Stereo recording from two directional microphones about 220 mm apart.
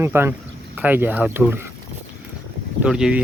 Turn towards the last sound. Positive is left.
turn(degrees=-5)  # may be behind; listen again after turning